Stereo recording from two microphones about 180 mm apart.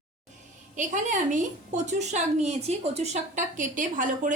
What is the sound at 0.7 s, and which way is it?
A woman's voice, 45° right (ahead or behind).